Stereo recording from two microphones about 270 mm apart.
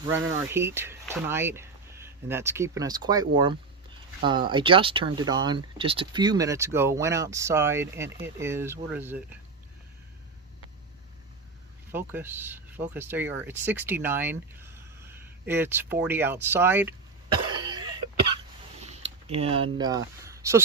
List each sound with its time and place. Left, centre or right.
0.0 s speech: centre
11.9 s speech: centre
17.7 s cough: centre
18.8 s a sound: right